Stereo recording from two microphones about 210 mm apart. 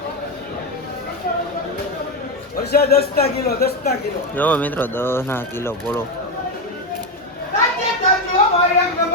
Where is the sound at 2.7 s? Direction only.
50° left (ahead or behind).